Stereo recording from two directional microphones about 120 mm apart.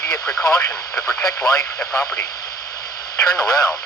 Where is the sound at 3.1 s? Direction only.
25° left (ahead or behind).